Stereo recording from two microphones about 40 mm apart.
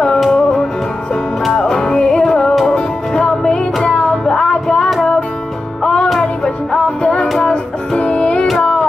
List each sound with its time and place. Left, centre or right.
0.3 s music: centre
6.4 s music: left
8.5 s child singing: left